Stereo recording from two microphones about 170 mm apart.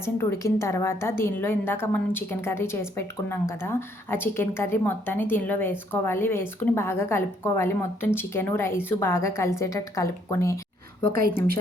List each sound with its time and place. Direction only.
0.0 s a woman's voice: 15° left (ahead or behind)